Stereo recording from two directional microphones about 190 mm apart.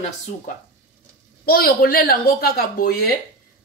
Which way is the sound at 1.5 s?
50° left (ahead or behind).